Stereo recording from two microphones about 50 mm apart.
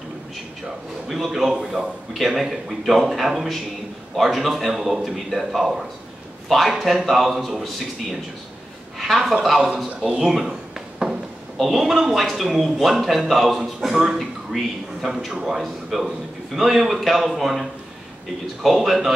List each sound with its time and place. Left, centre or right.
1.0 s a woman's voice: centre
9.9 s speech: centre
10.2 s a sound: centre
11.5 s speech: centre